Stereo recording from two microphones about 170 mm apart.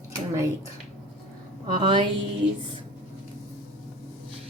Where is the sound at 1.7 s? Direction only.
30° right (ahead or behind).